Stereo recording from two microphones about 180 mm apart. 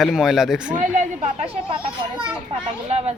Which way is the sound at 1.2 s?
30° right (ahead or behind).